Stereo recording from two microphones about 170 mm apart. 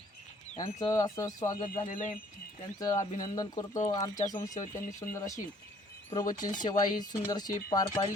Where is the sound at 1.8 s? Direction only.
50° left (ahead or behind).